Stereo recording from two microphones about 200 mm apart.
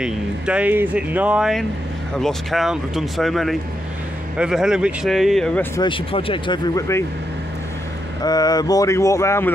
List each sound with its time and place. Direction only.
0.0 s speech: 5° right (ahead or behind)
5.8 s speech: 25° left (ahead or behind)
8.2 s speech: 20° left (ahead or behind)